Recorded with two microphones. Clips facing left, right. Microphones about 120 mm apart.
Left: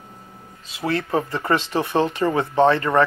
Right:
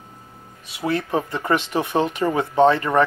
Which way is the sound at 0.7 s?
15° right (ahead or behind).